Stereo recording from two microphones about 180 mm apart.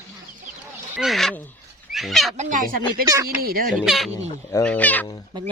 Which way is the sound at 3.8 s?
Centre (ahead or behind).